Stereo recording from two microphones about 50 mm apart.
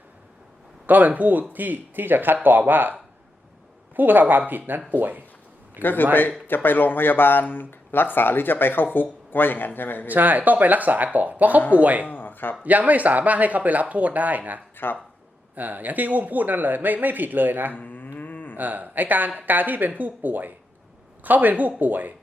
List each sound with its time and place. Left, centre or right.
0.9 s speech: right
5.8 s a man's voice: left
10.1 s speech: right
12.0 s a sound: left
12.6 s speech: right
14.8 s speech: left
15.5 s speech: right
17.7 s a sound: left
18.2 s moo: left
18.5 s speech: right